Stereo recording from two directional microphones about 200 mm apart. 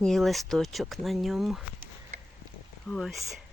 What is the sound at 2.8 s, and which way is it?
Speech, centre (ahead or behind).